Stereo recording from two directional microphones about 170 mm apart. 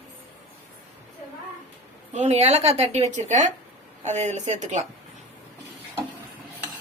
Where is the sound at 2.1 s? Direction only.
40° right (ahead or behind).